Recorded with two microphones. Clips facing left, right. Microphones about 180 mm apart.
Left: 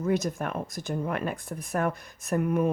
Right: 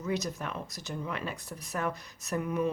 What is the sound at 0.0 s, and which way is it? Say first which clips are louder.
Speech: left 6 dB; 50° left (ahead or behind).